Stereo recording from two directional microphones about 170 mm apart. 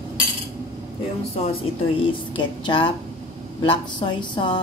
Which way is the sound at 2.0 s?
30° left (ahead or behind).